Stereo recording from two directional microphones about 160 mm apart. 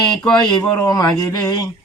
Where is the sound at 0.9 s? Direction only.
25° left (ahead or behind).